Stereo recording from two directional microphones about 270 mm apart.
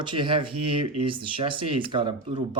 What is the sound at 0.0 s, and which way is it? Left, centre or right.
Speech, centre.